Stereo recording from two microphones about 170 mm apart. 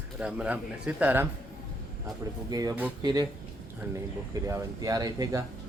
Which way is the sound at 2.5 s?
20° right (ahead or behind).